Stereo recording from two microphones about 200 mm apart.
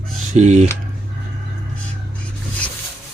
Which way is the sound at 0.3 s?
35° right (ahead or behind).